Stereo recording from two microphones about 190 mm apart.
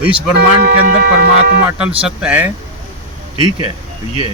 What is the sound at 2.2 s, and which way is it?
Speech, 10° right (ahead or behind).